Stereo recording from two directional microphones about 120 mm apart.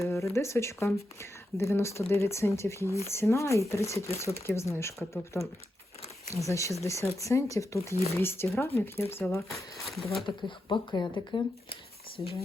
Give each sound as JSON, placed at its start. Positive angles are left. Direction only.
{"t": 0.0, "sound": "speech", "side_deg": 25}
{"t": 9.2, "sound": "speech", "side_deg": 5}
{"t": 10.2, "sound": "speech", "side_deg": 40}